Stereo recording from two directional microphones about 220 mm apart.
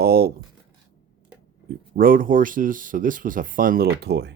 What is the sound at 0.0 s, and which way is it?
Speech, 45° right (ahead or behind).